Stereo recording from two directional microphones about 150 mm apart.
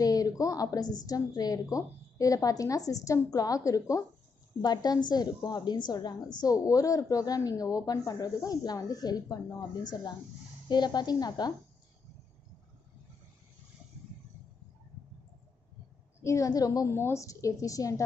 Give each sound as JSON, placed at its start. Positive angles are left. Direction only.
{"t": 0.0, "sound": "a woman's voice", "side_deg": 25}
{"t": 16.2, "sound": "a woman's voice", "side_deg": 20}